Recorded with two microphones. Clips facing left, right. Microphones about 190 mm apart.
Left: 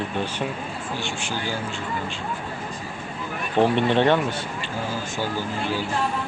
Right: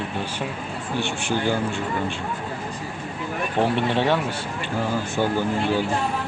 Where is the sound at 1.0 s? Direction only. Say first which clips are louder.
Right 4 dB; 60° right (ahead or behind).